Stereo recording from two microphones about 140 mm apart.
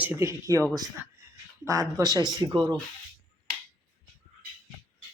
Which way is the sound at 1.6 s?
25° right (ahead or behind).